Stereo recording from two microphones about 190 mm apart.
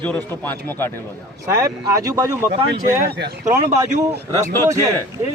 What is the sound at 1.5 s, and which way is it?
Speech, 15° right (ahead or behind).